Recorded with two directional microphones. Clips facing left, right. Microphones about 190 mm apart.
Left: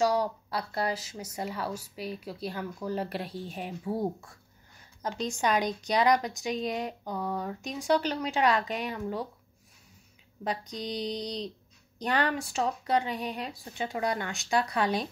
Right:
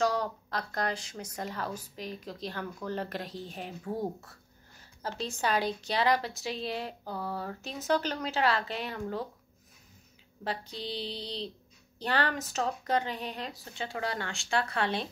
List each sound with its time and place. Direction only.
0.0 s a woman's voice: 10° left (ahead or behind)
6.4 s mantra: 30° right (ahead or behind)
6.8 s a woman's voice: 15° left (ahead or behind)
10.5 s mantra: 30° right (ahead or behind)
12.3 s a woman's voice: 10° left (ahead or behind)
12.8 s mantra: 35° right (ahead or behind)
13.2 s a woman's voice: 10° left (ahead or behind)